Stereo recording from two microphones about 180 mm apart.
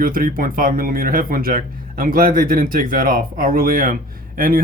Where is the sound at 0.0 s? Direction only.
50° right (ahead or behind).